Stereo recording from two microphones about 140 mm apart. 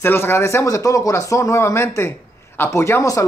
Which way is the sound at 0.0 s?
15° left (ahead or behind).